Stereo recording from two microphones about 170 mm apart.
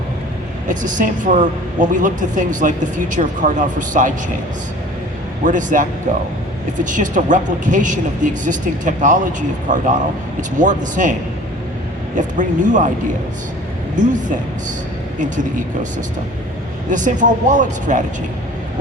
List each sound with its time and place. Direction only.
0.7 s speech: 50° right (ahead or behind)
5.5 s speech: 50° right (ahead or behind)
13.9 s speech: 50° right (ahead or behind)
16.9 s speech: 50° right (ahead or behind)